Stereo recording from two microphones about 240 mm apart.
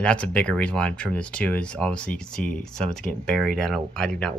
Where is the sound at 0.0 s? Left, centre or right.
Centre.